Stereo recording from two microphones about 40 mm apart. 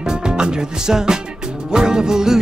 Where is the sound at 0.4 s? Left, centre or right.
Centre.